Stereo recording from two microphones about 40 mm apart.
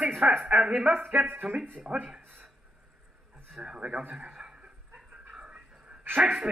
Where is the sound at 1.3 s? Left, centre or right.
Right.